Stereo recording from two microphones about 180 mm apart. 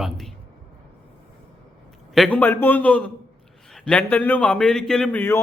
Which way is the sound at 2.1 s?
5° left (ahead or behind).